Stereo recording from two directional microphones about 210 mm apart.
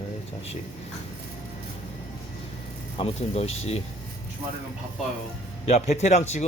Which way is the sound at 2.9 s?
30° left (ahead or behind).